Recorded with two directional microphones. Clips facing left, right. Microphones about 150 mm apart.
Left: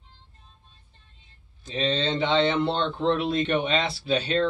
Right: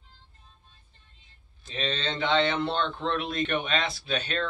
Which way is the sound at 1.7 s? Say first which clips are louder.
Left 6 dB; 25° left (ahead or behind).